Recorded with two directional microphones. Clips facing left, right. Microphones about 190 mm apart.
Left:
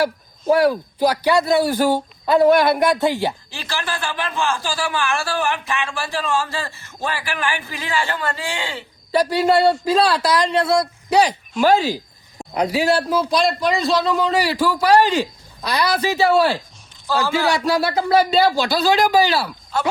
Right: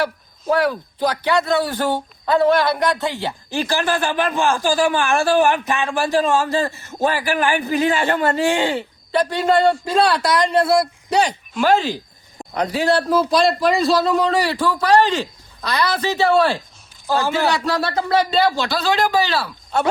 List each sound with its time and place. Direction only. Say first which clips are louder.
0.4 s speech: left 3 dB; 10° left (ahead or behind)
3.8 s a man's voice: right 6 dB; 45° right (ahead or behind)
9.1 s speech: left 1 dB; 10° left (ahead or behind)
17.1 s a man's voice: right 1 dB; 15° right (ahead or behind)
17.7 s speech: left 2 dB; 5° left (ahead or behind)